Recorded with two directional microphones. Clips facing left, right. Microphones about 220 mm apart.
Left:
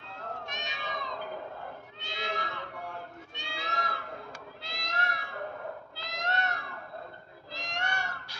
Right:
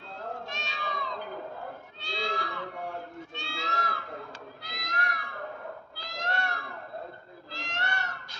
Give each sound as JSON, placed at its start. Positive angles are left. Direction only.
{"t": 0.5, "sound": "cat", "side_deg": 20}
{"t": 3.3, "sound": "a sound", "side_deg": 15}
{"t": 4.6, "sound": "cat", "side_deg": 25}
{"t": 5.9, "sound": "goat", "side_deg": 20}
{"t": 7.5, "sound": "cat", "side_deg": 15}